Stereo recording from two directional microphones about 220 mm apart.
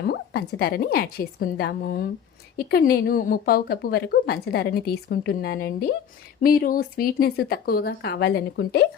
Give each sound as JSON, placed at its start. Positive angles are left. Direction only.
{"t": 0.0, "sound": "a woman's voice", "side_deg": 45}